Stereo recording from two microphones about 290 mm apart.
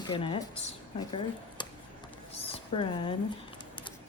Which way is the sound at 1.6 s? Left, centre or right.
Centre.